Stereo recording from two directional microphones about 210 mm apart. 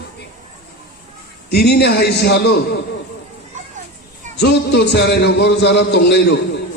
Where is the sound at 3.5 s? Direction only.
35° right (ahead or behind).